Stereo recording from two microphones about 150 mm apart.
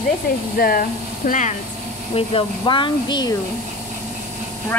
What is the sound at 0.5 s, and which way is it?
Speech, 80° left.